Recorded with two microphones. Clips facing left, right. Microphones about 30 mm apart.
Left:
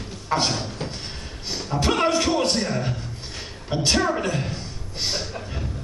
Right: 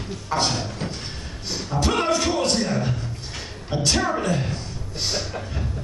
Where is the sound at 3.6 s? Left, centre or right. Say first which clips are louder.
Left 1 dB; centre.